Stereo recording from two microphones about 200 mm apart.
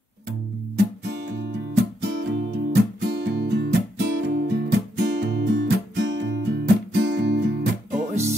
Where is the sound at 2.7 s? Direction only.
60° right (ahead or behind).